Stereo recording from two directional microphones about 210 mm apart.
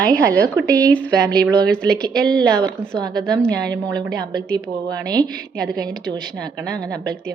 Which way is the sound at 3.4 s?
5° left (ahead or behind).